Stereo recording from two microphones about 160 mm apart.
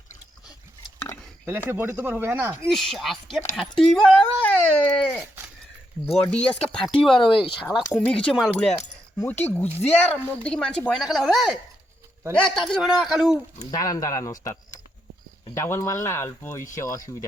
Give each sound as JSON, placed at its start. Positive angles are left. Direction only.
{"t": 1.5, "sound": "speech", "side_deg": -15}
{"t": 2.6, "sound": "speech", "side_deg": 0}
{"t": 6.3, "sound": "speech", "side_deg": 5}
{"t": 7.2, "sound": "speech", "side_deg": 30}
{"t": 7.6, "sound": "speech", "side_deg": 0}
{"t": 13.6, "sound": "speech", "side_deg": 25}